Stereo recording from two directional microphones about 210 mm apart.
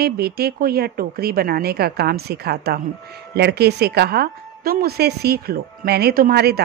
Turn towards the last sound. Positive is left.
turn(degrees=-50)  # may be behind; listen again after turning